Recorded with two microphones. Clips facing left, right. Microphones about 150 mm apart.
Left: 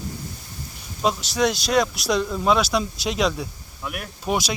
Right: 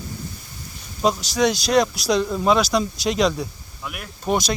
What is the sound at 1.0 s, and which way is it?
Speech, centre (ahead or behind).